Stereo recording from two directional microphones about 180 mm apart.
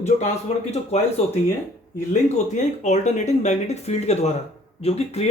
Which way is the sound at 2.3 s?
40° left (ahead or behind).